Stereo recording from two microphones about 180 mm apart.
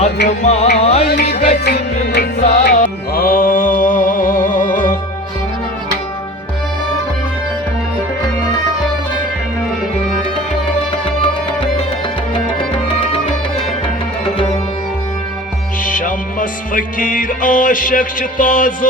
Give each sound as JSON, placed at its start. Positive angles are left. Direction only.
{"t": 0.4, "sound": "music", "side_deg": 35}
{"t": 1.0, "sound": "music", "side_deg": 60}
{"t": 15.8, "sound": "music", "side_deg": 50}